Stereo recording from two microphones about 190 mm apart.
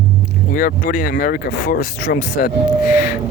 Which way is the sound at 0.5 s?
45° left (ahead or behind).